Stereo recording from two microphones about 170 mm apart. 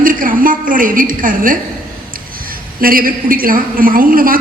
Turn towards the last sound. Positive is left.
turn(degrees=-55)  # may be behind; listen again after turning